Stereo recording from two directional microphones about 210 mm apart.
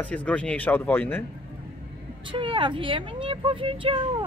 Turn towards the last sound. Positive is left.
turn(degrees=-25)  # may be behind; listen again after turning